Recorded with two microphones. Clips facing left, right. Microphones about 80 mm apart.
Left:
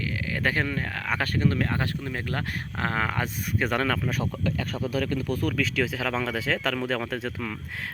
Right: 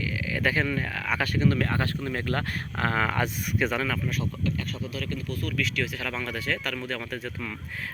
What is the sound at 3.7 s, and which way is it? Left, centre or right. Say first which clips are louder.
Speech: left 3 dB; left.